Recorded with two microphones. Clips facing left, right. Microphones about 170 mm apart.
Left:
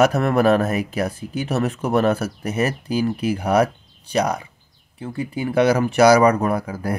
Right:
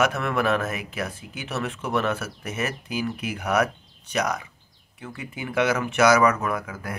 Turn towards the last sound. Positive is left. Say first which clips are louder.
# left 7 dB
turn(degrees=35)  # may be behind; listen again after turning